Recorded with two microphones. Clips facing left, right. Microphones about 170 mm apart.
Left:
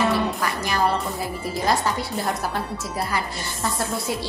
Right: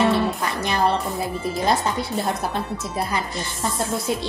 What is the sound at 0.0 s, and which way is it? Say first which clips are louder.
Music: right 2 dB; 25° right (ahead or behind).